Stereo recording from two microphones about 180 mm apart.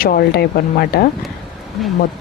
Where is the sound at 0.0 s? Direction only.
55° left (ahead or behind).